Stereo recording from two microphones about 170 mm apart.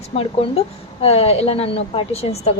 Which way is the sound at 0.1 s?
45° left (ahead or behind).